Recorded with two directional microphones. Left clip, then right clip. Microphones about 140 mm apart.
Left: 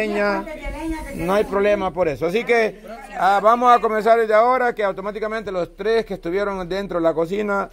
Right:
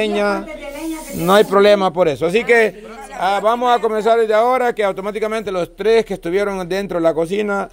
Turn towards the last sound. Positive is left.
turn(degrees=-20)  # may be behind; listen again after turning